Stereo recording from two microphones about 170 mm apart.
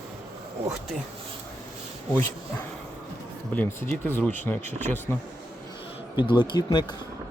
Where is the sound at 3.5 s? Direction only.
10° left (ahead or behind).